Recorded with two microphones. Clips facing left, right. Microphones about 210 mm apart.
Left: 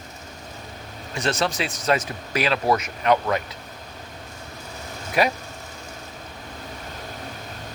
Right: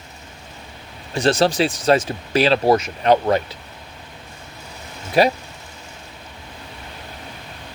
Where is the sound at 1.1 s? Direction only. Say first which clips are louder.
Right 7 dB; 30° right (ahead or behind).